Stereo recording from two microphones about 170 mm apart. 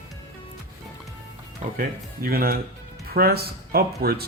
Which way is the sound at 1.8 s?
60° right (ahead or behind).